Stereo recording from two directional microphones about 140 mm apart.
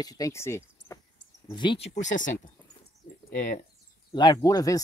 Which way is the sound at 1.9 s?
60° left (ahead or behind).